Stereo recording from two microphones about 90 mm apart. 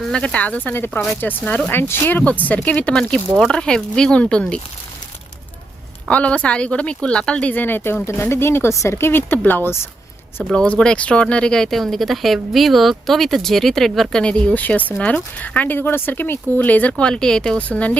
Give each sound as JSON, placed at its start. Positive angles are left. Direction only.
{"t": 0.0, "sound": "speech", "side_deg": 10}
{"t": 6.1, "sound": "speech", "side_deg": 15}
{"t": 10.5, "sound": "speech", "side_deg": 10}